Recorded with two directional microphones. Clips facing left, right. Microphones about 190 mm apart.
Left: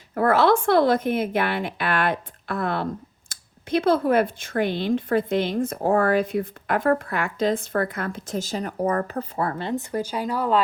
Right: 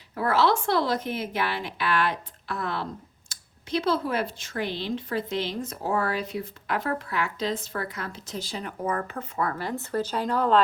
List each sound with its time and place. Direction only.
0.1 s a woman's voice: 55° left (ahead or behind); by 10.6 s 10° left (ahead or behind)